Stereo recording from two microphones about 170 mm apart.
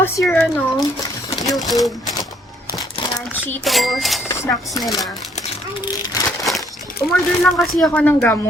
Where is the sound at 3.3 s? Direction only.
10° left (ahead or behind).